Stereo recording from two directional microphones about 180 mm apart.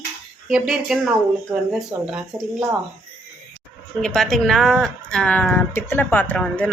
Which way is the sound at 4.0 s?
5° left (ahead or behind).